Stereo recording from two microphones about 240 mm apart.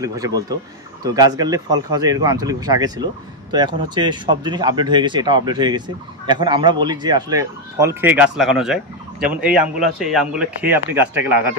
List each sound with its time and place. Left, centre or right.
0.0 s speech: centre